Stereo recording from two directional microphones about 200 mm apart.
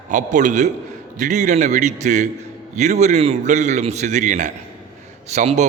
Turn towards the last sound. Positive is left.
turn(degrees=-35)  # may be behind; listen again after turning